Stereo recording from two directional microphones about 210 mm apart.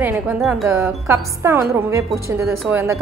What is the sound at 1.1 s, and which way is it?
A woman's voice, 10° right (ahead or behind).